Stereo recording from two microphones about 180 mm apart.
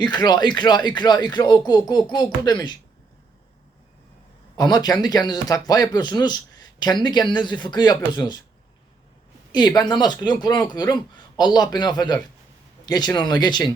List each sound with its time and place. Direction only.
0.0 s a man's voice: 25° left (ahead or behind)
4.5 s a man's voice: 20° left (ahead or behind)
9.5 s a man's voice: 25° left (ahead or behind)